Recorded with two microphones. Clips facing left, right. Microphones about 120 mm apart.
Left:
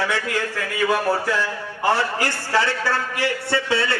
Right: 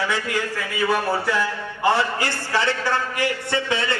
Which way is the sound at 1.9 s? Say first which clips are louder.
Even; 20° right (ahead or behind).